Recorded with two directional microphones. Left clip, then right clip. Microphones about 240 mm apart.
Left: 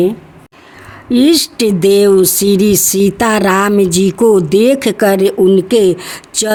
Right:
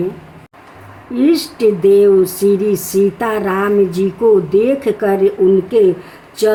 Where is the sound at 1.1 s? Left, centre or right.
Left.